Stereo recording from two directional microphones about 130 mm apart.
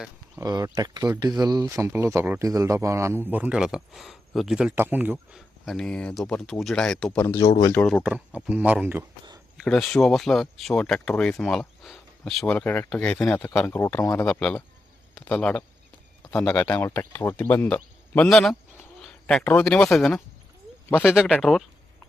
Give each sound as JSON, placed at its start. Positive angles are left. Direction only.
{"t": 0.3, "sound": "a man's voice", "side_deg": -25}
{"t": 5.1, "sound": "speech", "side_deg": 0}
{"t": 7.3, "sound": "a man's voice", "side_deg": 25}
{"t": 8.0, "sound": "a man's voice", "side_deg": -10}
{"t": 9.6, "sound": "speech", "side_deg": 5}
{"t": 12.5, "sound": "a man's voice", "side_deg": 15}
{"t": 14.3, "sound": "speech", "side_deg": 10}
{"t": 21.1, "sound": "speech", "side_deg": -5}